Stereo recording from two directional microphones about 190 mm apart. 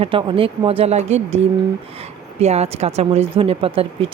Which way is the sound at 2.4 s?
35° right (ahead or behind).